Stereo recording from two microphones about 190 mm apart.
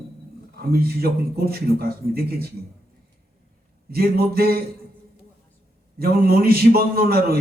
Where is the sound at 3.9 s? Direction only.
55° right (ahead or behind).